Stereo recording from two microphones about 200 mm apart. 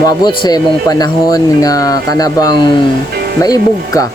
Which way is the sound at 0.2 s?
20° left (ahead or behind).